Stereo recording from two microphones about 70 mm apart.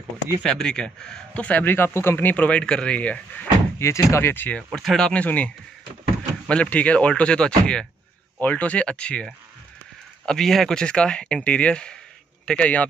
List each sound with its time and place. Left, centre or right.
0.4 s speech: centre
1.4 s speech: left
3.8 s speech: left
4.3 s speech: left
4.8 s speech: centre
5.1 s speech: left
6.5 s speech: centre
8.4 s speech: left